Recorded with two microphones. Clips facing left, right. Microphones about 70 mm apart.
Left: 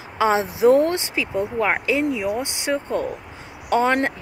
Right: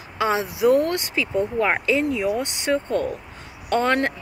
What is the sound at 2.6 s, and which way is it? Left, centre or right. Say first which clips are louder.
Speech: right 1 dB; centre.